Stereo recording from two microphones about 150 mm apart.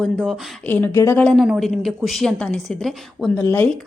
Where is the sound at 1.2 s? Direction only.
Centre (ahead or behind).